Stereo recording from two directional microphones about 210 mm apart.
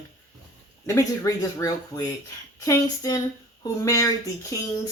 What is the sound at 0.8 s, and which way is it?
Speech, 15° left (ahead or behind).